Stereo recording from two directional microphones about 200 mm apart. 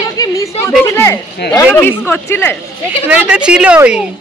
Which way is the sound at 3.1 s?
5° right (ahead or behind).